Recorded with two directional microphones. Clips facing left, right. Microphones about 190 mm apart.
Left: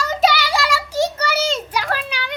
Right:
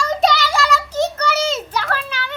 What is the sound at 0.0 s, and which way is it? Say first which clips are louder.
Child singing: right 1 dB; 5° left (ahead or behind).